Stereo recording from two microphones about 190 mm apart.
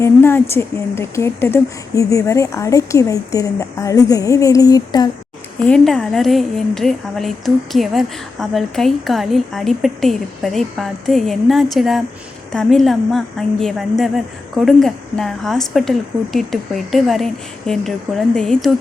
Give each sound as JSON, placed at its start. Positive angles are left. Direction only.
{"t": 0.0, "sound": "a woman's voice", "side_deg": 10}
{"t": 5.6, "sound": "a woman's voice", "side_deg": 5}